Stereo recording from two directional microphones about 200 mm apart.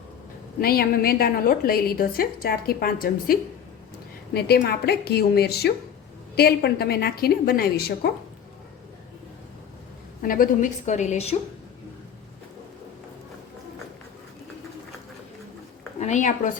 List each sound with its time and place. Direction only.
0.6 s a woman's voice: 50° left (ahead or behind)
4.4 s a woman's voice: 55° left (ahead or behind)
10.2 s a woman's voice: 45° left (ahead or behind)
16.0 s a woman's voice: 35° left (ahead or behind)